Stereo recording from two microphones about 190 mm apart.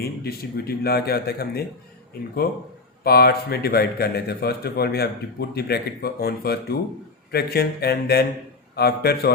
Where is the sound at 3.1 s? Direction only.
55° left (ahead or behind).